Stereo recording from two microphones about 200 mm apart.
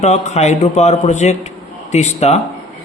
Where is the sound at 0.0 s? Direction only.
35° left (ahead or behind).